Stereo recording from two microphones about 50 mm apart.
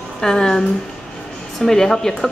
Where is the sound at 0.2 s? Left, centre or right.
Centre.